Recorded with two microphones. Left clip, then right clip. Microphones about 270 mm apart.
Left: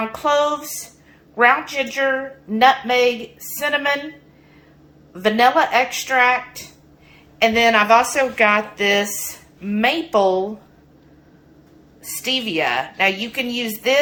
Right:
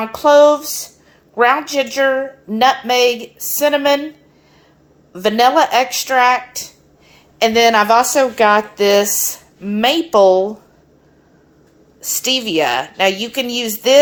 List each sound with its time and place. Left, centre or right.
0.2 s a sound: right
1.4 s a woman's voice: right
5.1 s a woman's voice: right
12.0 s a woman's voice: right